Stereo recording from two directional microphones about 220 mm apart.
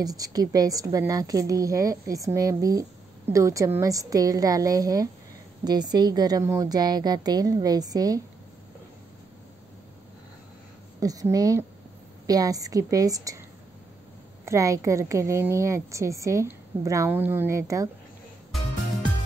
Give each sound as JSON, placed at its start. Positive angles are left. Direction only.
{"t": 0.0, "sound": "a woman's voice", "side_deg": -15}
{"t": 11.0, "sound": "a woman's voice", "side_deg": -15}
{"t": 14.4, "sound": "a woman's voice", "side_deg": -15}